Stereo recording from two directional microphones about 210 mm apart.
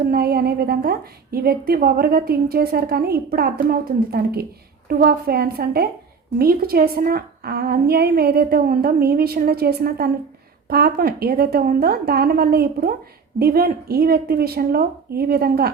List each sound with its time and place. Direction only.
0.0 s a woman's voice: 45° right (ahead or behind)